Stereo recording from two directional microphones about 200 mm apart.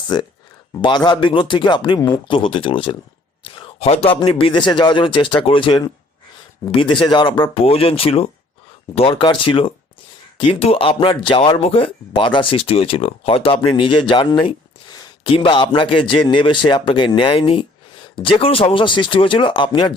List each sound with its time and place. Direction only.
0.1 s speech: 20° left (ahead or behind)